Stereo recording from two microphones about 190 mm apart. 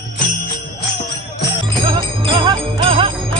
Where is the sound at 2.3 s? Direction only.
25° right (ahead or behind).